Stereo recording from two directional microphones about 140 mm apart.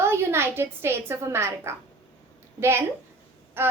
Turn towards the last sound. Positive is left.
turn(degrees=-15)  # may be behind; listen again after turning